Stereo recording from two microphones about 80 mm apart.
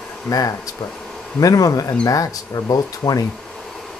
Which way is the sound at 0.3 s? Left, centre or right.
Left.